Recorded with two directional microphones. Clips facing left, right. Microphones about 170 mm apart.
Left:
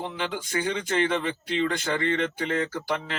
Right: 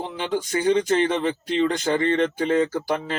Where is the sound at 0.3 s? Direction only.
40° right (ahead or behind).